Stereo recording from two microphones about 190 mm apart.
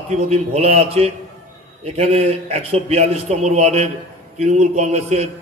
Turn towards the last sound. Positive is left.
turn(degrees=-35)  # may be behind; listen again after turning